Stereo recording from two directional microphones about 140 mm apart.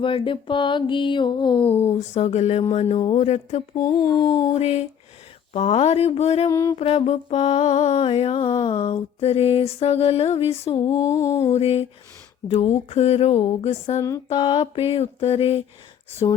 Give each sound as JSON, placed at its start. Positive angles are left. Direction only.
{"t": 0.0, "sound": "mantra", "side_deg": 40}
{"t": 1.7, "sound": "speech", "side_deg": 20}
{"t": 2.0, "sound": "mantra", "side_deg": 55}
{"t": 3.8, "sound": "speech", "side_deg": 25}
{"t": 4.5, "sound": "mantra", "side_deg": 50}
{"t": 6.5, "sound": "speech", "side_deg": 20}
{"t": 6.7, "sound": "mantra", "side_deg": 50}
{"t": 10.8, "sound": "speech", "side_deg": 25}
{"t": 11.4, "sound": "mantra", "side_deg": 50}
{"t": 14.3, "sound": "mantra", "side_deg": 35}